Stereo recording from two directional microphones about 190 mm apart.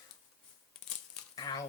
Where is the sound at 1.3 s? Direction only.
20° left (ahead or behind).